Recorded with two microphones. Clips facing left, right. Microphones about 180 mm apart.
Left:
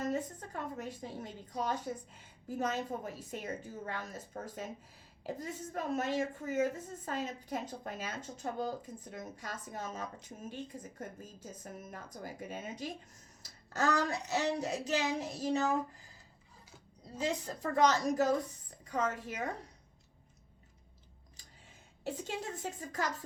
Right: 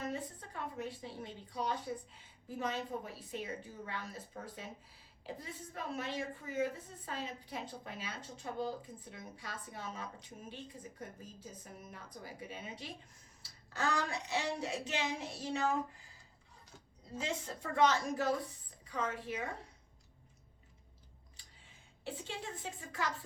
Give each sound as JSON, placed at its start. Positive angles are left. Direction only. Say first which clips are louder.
{"t": 0.0, "sound": "a woman's voice", "louder": "left 5 dB", "side_deg": 45}
{"t": 17.2, "sound": "a woman's voice", "louder": "left 4 dB", "side_deg": 40}
{"t": 21.4, "sound": "a sound", "louder": "left 6 dB", "side_deg": 45}
{"t": 22.0, "sound": "a woman's voice", "louder": "left 5 dB", "side_deg": 40}